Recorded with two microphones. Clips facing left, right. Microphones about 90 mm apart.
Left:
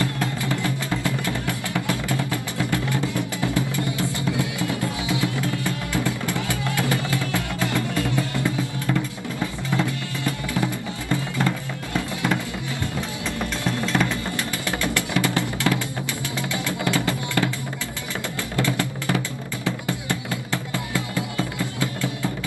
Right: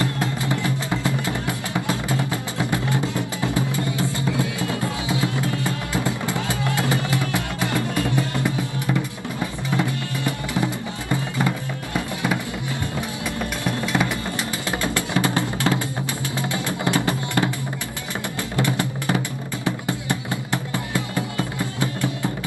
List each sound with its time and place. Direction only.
0.0 s music: 20° right (ahead or behind)
5.2 s music: 25° right (ahead or behind)
13.7 s music: 15° right (ahead or behind)
18.6 s music: 20° right (ahead or behind)